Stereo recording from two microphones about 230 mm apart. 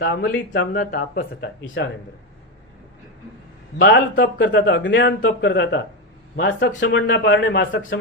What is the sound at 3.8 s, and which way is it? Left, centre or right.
Speech, left.